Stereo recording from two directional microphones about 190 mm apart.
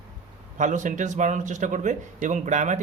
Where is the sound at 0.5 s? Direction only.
40° right (ahead or behind).